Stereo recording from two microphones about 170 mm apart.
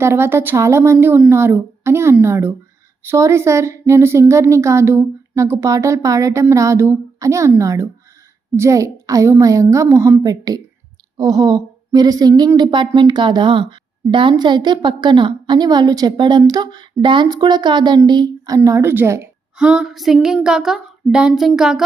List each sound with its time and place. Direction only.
0.0 s a woman's voice: 15° right (ahead or behind)
19.5 s child singing: 5° right (ahead or behind)